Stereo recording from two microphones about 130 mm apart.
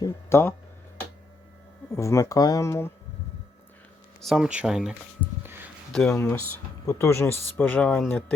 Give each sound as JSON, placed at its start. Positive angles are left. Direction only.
{"t": 0.0, "sound": "a sound", "side_deg": 20}
{"t": 1.9, "sound": "speech", "side_deg": 25}
{"t": 4.2, "sound": "speech", "side_deg": 0}
{"t": 6.8, "sound": "speech", "side_deg": 20}